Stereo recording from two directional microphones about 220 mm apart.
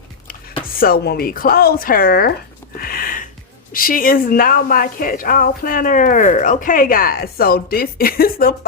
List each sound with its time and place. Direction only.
0.6 s a woman's voice: 40° left (ahead or behind)
2.7 s a sound: 40° left (ahead or behind)
3.7 s a woman's voice: 40° left (ahead or behind)